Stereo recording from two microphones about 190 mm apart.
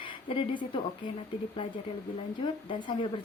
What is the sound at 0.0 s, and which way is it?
Speech, 25° left (ahead or behind).